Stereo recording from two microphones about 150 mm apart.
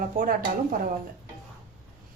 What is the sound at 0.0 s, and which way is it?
Speech, 70° right (ahead or behind).